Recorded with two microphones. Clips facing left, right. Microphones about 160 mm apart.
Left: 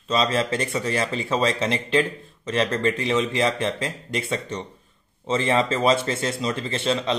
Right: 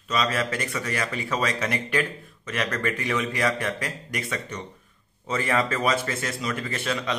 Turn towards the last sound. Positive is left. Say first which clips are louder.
# left 4 dB
turn(degrees=25)  # may be behind; listen again after turning